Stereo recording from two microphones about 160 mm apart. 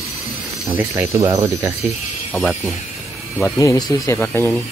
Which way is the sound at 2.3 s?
5° right (ahead or behind).